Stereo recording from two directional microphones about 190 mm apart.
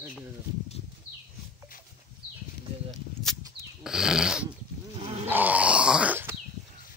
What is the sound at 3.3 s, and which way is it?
Livestock, 5° left (ahead or behind).